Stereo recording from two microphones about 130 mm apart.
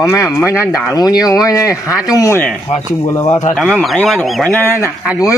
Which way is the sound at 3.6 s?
Centre (ahead or behind).